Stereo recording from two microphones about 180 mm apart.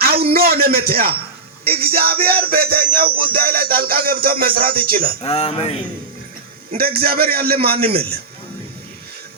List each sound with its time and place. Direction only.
0.3 s music: 55° right (ahead or behind)
5.2 s speech: 35° left (ahead or behind)
6.7 s music: 55° right (ahead or behind)